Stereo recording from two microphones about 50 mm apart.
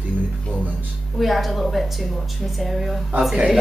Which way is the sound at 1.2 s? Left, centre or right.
Centre.